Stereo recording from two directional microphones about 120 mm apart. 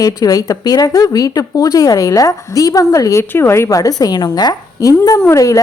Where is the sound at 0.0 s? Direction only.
30° left (ahead or behind).